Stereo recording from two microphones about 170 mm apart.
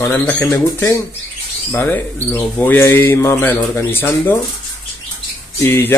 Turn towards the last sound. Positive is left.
turn(degrees=15)  # may be behind; listen again after turning